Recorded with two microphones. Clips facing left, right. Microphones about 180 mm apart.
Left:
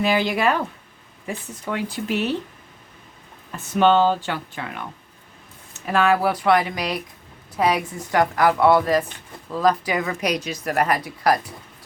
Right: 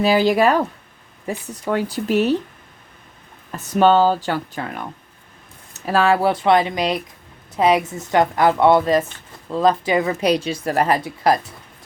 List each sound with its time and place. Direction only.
0.0 s speech: 40° right (ahead or behind)
3.5 s speech: 40° right (ahead or behind)